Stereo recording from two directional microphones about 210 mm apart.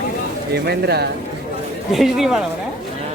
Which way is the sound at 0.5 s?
50° right (ahead or behind).